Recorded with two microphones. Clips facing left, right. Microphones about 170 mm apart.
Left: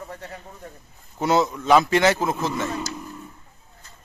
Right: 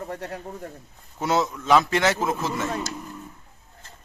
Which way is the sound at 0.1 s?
75° right (ahead or behind).